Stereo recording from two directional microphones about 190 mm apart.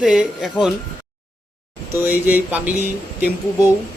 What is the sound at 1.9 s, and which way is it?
Speech, 10° right (ahead or behind).